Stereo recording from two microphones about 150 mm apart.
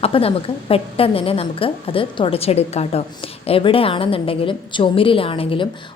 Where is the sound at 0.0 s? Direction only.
40° left (ahead or behind).